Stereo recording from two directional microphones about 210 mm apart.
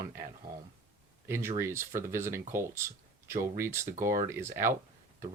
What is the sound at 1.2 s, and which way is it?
Speech, 10° right (ahead or behind).